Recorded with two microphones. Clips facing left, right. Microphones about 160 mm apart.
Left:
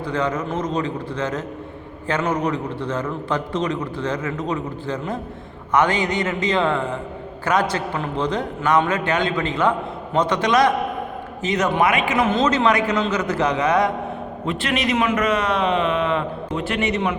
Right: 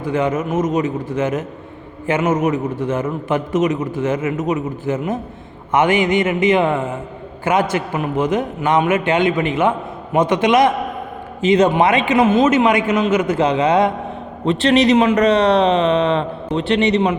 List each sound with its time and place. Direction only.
0.1 s a man's voice: 20° right (ahead or behind)
2.6 s a man's voice: 45° right (ahead or behind)
2.9 s a man's voice: 20° right (ahead or behind)
12.3 s a man's voice: 15° right (ahead or behind)